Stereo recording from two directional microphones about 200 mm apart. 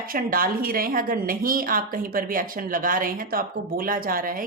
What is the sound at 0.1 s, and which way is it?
A woman's voice, 45° right (ahead or behind).